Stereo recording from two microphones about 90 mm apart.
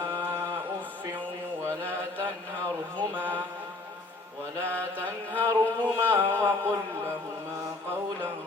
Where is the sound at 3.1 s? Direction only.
25° right (ahead or behind).